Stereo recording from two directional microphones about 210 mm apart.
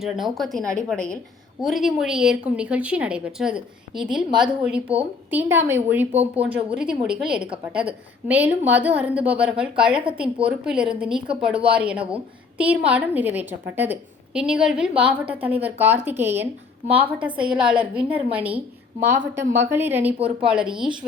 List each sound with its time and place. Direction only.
0.0 s a woman's voice: centre (ahead or behind)
16.8 s a woman's voice: 25° right (ahead or behind)
17.2 s a woman's voice: 5° right (ahead or behind)